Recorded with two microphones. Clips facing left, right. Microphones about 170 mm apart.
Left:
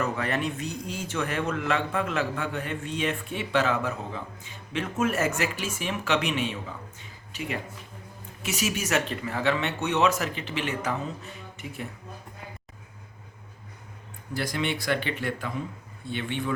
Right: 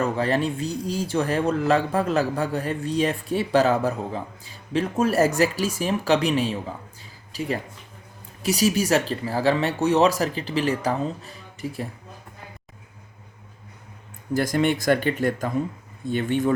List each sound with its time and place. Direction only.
0.0 s speech: 30° right (ahead or behind)
14.3 s speech: 45° right (ahead or behind)